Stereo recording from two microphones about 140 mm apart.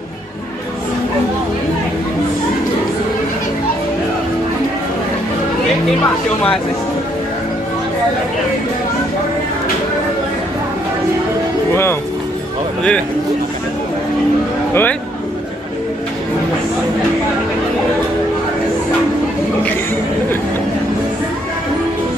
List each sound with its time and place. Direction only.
11.7 s speech: 15° left (ahead or behind)
14.7 s speech: 15° left (ahead or behind)